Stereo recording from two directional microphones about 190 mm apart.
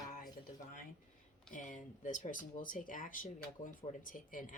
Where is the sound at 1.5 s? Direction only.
40° left (ahead or behind).